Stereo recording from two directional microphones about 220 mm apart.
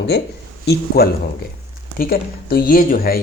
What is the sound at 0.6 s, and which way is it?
Speech, 45° left (ahead or behind).